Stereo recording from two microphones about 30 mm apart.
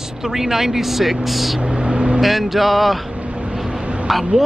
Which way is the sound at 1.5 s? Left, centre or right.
Right.